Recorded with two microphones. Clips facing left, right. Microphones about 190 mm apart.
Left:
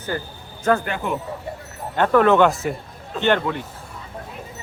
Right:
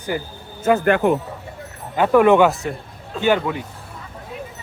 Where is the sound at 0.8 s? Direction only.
55° right (ahead or behind).